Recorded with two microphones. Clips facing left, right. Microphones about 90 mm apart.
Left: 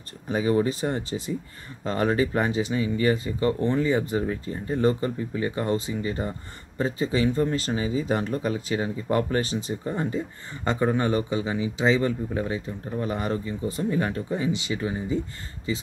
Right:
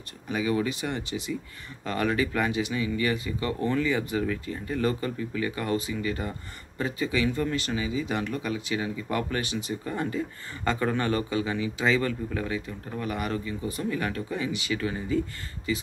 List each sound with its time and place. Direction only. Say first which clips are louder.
0.3 s speech: left 4 dB; 35° left (ahead or behind)